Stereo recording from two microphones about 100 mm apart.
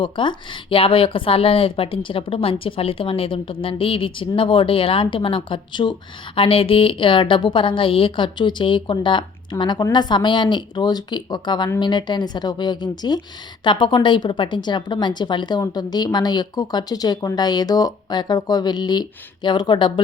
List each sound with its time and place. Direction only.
0.0 s speech: 55° left (ahead or behind)